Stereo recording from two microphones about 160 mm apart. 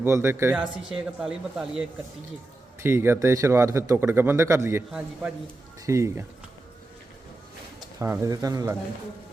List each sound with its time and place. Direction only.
0.0 s speech: 15° right (ahead or behind)
2.8 s speech: 15° right (ahead or behind)
4.9 s a man's voice: 5° right (ahead or behind)
5.8 s speech: 20° right (ahead or behind)
7.9 s speech: 20° right (ahead or behind)